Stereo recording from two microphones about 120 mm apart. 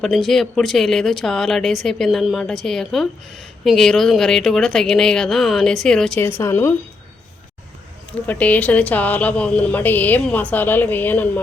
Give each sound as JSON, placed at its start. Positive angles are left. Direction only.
{"t": 0.0, "sound": "speech", "side_deg": 0}
{"t": 6.1, "sound": "speech", "side_deg": 20}
{"t": 8.3, "sound": "speech", "side_deg": 10}